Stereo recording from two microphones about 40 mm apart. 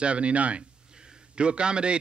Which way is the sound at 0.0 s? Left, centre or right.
Right.